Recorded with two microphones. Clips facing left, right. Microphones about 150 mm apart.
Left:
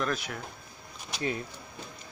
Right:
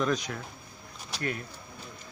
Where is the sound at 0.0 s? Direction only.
5° left (ahead or behind).